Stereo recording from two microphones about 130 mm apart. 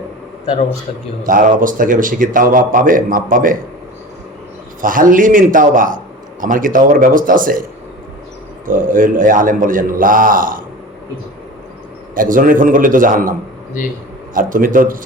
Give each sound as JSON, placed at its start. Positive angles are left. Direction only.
{"t": 1.2, "sound": "a man's voice", "side_deg": -90}
{"t": 4.8, "sound": "a man's voice", "side_deg": -90}
{"t": 8.6, "sound": "a man's voice", "side_deg": -90}
{"t": 12.1, "sound": "a man's voice", "side_deg": -90}
{"t": 13.8, "sound": "a man's voice", "side_deg": 85}
{"t": 14.3, "sound": "a man's voice", "side_deg": -90}